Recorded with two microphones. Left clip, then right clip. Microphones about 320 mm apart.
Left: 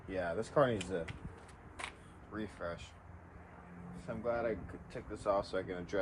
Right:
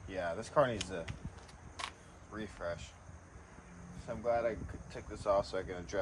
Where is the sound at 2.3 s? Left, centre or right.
Right.